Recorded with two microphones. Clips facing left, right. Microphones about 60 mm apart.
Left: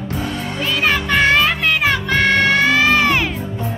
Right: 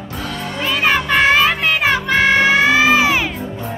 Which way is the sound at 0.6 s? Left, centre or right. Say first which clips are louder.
Right 2 dB; centre.